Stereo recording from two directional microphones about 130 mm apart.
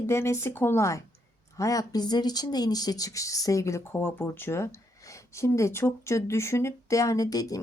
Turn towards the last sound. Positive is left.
turn(degrees=30)  # may be behind; listen again after turning